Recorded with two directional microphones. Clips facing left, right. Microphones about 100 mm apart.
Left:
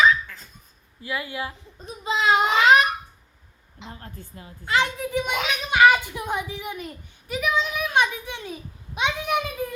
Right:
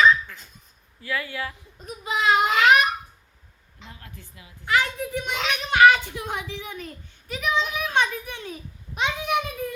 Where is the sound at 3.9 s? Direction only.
40° left (ahead or behind).